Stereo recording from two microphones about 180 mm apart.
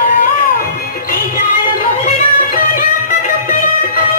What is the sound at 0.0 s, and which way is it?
Music, 50° left (ahead or behind).